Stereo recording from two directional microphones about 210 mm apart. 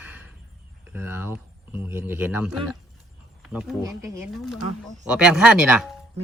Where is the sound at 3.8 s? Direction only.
15° right (ahead or behind).